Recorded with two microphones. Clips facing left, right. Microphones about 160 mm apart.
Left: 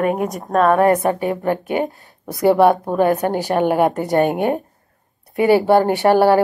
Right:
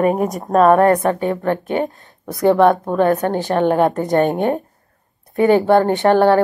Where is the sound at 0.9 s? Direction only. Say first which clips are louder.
Right 1 dB; 15° left (ahead or behind).